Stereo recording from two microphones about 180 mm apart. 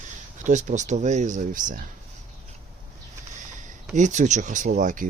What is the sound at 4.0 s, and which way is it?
Speech, 40° right (ahead or behind).